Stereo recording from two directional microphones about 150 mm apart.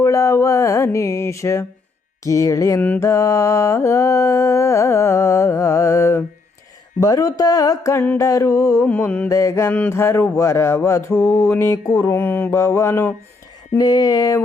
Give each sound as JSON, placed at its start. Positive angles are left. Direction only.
{"t": 0.0, "sound": "mantra", "side_deg": 20}